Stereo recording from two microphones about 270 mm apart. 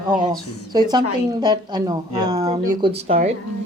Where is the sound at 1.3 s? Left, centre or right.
Centre.